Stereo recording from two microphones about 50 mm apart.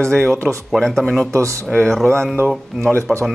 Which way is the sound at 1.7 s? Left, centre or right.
Centre.